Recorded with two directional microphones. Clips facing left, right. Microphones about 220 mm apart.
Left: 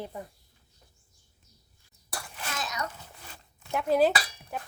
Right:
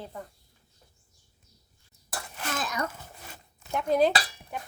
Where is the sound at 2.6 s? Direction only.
50° right (ahead or behind).